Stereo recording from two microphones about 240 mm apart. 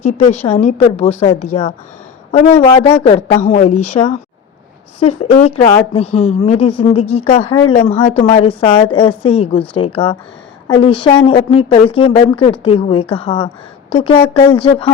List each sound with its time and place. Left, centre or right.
0.0 s a woman's voice: left
5.2 s a woman's voice: left